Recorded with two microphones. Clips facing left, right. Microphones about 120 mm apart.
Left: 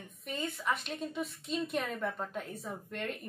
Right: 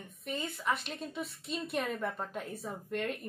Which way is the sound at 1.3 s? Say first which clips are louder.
Left 3 dB; 50° left (ahead or behind).